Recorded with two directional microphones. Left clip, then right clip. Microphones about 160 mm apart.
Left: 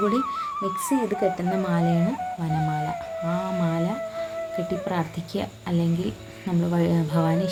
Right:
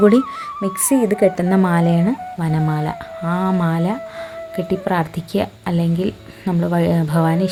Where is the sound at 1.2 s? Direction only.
55° right (ahead or behind).